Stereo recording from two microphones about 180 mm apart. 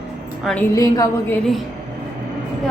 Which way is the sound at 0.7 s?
20° left (ahead or behind).